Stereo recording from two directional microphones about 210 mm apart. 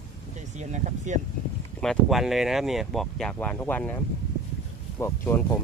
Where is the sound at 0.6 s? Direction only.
35° right (ahead or behind).